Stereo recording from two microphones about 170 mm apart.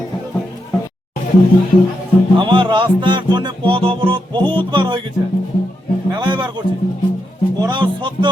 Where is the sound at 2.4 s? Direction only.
30° right (ahead or behind).